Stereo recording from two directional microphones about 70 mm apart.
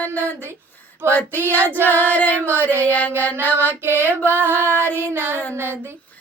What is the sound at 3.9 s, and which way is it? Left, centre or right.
Female singing, right.